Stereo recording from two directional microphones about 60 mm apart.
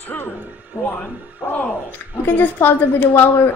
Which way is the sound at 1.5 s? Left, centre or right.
Left.